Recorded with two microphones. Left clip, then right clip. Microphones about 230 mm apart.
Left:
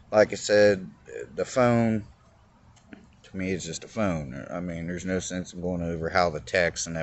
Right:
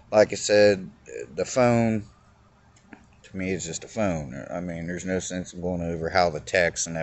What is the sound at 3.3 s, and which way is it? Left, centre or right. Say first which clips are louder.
Speech: right 1 dB; centre.